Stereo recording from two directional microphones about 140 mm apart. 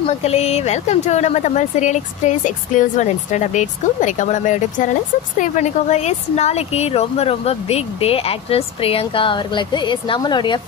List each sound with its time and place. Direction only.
0.2 s speech: 50° left (ahead or behind); by 10.6 s 30° left (ahead or behind)